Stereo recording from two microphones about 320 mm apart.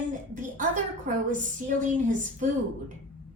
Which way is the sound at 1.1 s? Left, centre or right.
Right.